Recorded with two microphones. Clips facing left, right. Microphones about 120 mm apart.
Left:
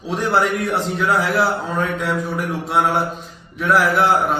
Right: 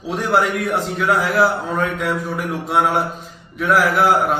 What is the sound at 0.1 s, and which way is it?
A man's voice, centre (ahead or behind).